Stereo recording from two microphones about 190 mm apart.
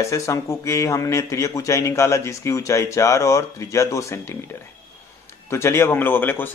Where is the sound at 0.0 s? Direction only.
15° left (ahead or behind).